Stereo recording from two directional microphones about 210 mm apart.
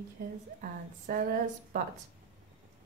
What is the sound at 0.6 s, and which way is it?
Speech, 40° right (ahead or behind).